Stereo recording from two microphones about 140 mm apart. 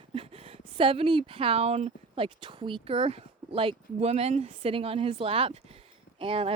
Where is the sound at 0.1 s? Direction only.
45° right (ahead or behind).